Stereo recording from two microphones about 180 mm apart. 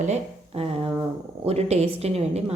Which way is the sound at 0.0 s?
35° right (ahead or behind).